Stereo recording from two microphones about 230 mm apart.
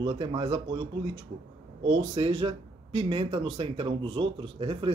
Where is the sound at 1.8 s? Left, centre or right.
Centre.